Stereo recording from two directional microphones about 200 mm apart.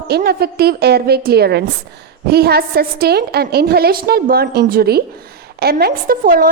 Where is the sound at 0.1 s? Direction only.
50° right (ahead or behind).